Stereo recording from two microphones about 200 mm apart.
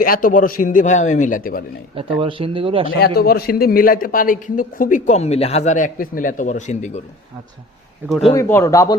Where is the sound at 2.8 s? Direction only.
50° left (ahead or behind); by 7.0 s 35° left (ahead or behind).